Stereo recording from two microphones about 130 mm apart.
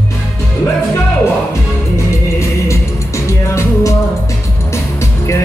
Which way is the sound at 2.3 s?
20° left (ahead or behind).